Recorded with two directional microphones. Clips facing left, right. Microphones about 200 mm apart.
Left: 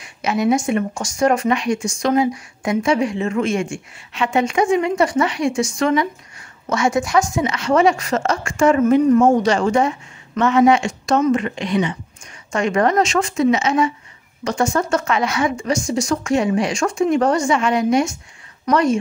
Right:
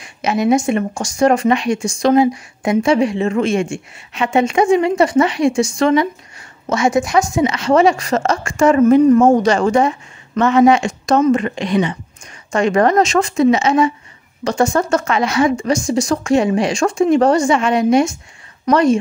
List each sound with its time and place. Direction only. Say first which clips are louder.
0.2 s a woman's voice: right 3 dB; 20° right (ahead or behind)